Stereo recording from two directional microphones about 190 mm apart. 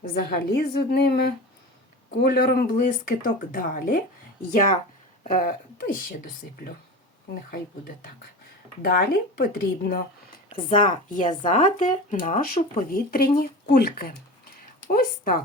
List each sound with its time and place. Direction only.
0.0 s a woman's voice: 50° left (ahead or behind)
5.2 s speech: 50° left (ahead or behind)
8.8 s a woman's voice: 55° left (ahead or behind)